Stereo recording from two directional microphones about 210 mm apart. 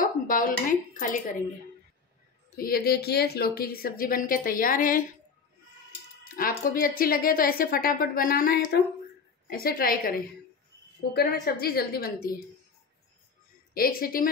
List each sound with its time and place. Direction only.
0.0 s speech: 40° left (ahead or behind)
2.5 s a woman's voice: 45° left (ahead or behind)
6.2 s a woman's voice: 40° left (ahead or behind)
13.7 s a woman's voice: 45° left (ahead or behind)